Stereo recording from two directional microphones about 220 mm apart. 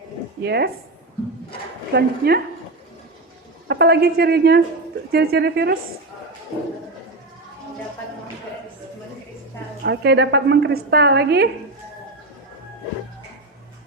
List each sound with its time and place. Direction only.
0.4 s a woman's voice: 50° right (ahead or behind)
1.9 s a woman's voice: 45° right (ahead or behind)
3.7 s a woman's voice: 50° right (ahead or behind)
9.8 s a woman's voice: 50° right (ahead or behind)